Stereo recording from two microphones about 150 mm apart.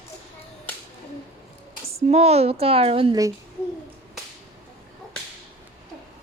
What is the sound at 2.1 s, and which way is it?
A child's voice, 45° right (ahead or behind).